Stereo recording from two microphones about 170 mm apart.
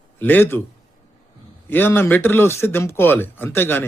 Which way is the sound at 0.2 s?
10° left (ahead or behind).